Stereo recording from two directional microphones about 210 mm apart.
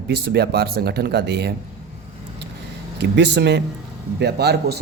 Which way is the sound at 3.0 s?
55° right (ahead or behind).